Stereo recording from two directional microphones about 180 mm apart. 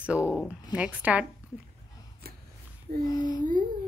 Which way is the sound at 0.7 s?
10° right (ahead or behind).